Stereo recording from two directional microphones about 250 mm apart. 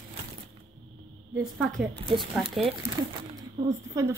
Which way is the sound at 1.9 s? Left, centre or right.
Right.